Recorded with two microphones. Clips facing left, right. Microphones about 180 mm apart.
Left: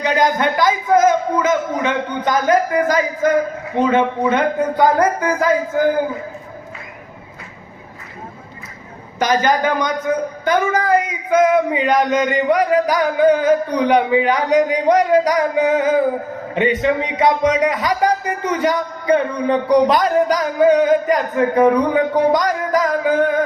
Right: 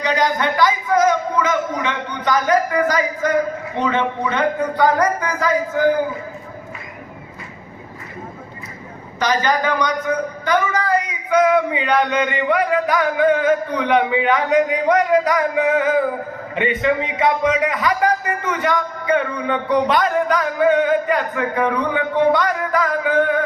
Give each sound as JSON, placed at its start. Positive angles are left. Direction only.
{"t": 0.0, "sound": "a sound", "side_deg": 50}
{"t": 3.8, "sound": "speech", "side_deg": 50}
{"t": 9.1, "sound": "a man's voice", "side_deg": 50}